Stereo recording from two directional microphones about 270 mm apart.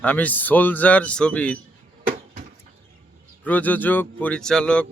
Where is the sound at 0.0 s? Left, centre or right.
Centre.